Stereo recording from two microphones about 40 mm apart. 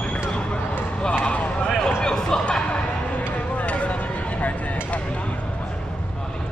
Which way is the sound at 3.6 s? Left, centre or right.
Left.